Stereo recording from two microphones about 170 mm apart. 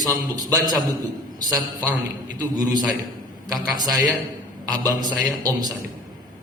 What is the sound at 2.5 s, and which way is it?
Speech, 25° right (ahead or behind).